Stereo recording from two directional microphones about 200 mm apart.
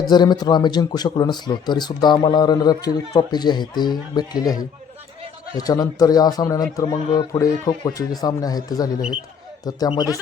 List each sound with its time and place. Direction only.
0.1 s a man's voice: 20° left (ahead or behind)